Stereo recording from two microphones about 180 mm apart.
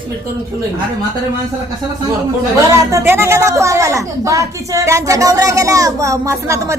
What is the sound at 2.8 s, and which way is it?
A woman's voice, 15° right (ahead or behind).